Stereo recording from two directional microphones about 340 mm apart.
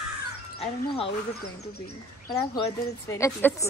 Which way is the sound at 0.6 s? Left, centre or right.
Centre.